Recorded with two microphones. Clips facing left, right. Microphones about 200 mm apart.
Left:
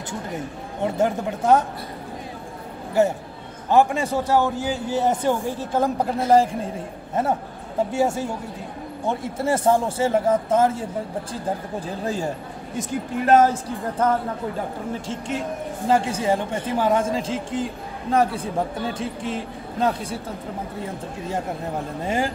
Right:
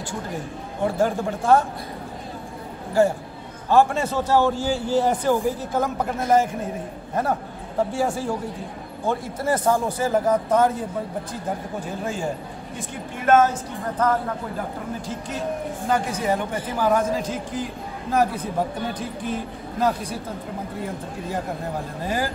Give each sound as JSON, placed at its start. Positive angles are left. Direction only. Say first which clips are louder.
{"t": 0.9, "sound": "a man's voice", "louder": "left 1 dB", "side_deg": 20}
{"t": 3.7, "sound": "a man's voice", "louder": "even", "side_deg": 15}
{"t": 7.9, "sound": "a man's voice", "louder": "left 1 dB", "side_deg": 20}
{"t": 11.8, "sound": "a woman's voice", "louder": "left 2 dB", "side_deg": 35}
{"t": 22.0, "sound": "a man's voice", "louder": "left 2 dB", "side_deg": 25}